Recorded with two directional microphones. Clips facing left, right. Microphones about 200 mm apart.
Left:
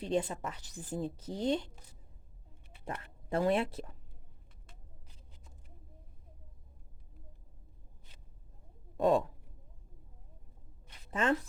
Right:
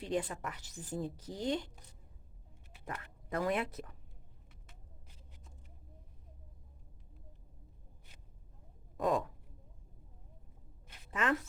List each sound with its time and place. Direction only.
0.0 s a woman's voice: 25° left (ahead or behind)
2.8 s speech: 30° left (ahead or behind)
9.0 s a sound: 30° left (ahead or behind)
11.1 s speech: 30° left (ahead or behind)